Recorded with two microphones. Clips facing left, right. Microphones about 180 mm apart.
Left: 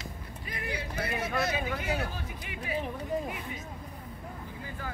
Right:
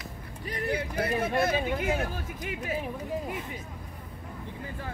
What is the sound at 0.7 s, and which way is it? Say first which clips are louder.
Speech: right 5 dB; 50° right (ahead or behind).